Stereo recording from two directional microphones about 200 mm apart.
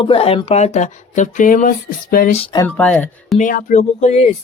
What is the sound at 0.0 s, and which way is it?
Speech, 30° left (ahead or behind).